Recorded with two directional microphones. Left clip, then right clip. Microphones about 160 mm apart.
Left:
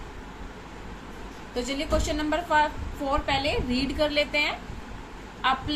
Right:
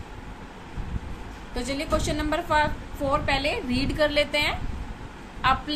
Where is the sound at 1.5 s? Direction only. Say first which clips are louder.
Even; 25° right (ahead or behind).